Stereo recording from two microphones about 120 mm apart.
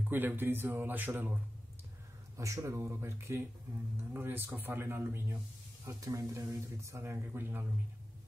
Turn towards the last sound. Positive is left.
turn(degrees=-15)  # may be behind; listen again after turning